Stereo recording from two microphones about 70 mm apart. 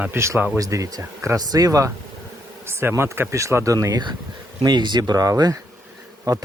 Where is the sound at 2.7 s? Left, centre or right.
Right.